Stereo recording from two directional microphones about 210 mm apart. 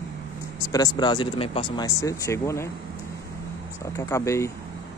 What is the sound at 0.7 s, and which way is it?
Speech, 20° left (ahead or behind).